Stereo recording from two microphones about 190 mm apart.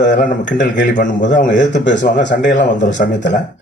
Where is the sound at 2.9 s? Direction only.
70° left (ahead or behind).